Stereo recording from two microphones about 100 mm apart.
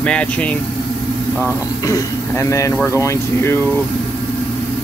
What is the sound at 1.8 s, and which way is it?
Speech, 35° left (ahead or behind).